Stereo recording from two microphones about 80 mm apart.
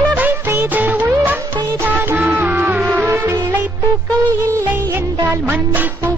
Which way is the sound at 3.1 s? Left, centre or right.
Right.